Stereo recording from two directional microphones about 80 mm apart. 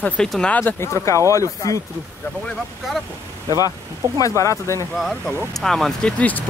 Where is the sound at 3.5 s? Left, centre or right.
Left.